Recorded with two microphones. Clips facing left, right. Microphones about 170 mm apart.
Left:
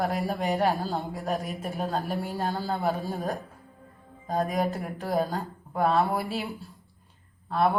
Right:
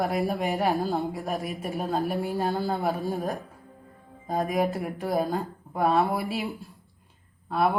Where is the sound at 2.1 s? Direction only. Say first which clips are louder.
Right 3 dB; 15° right (ahead or behind).